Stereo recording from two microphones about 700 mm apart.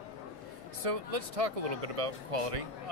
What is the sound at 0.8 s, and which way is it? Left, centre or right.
Speech, right.